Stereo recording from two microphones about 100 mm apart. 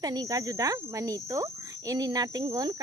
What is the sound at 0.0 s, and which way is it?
Speech, 40° right (ahead or behind).